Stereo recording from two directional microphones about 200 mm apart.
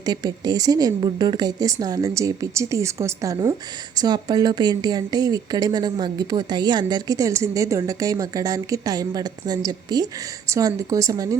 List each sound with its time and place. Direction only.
0.0 s a woman's voice: 20° right (ahead or behind)